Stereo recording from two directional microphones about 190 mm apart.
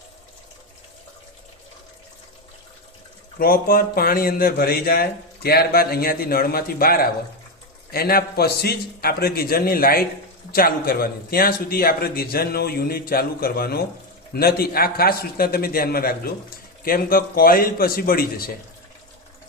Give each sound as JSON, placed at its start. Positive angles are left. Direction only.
{"t": 3.3, "sound": "a man's voice", "side_deg": 50}